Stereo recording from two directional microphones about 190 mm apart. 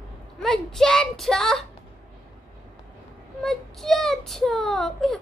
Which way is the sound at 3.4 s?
Centre (ahead or behind).